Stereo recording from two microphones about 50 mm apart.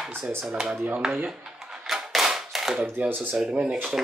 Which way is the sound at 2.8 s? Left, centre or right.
Right.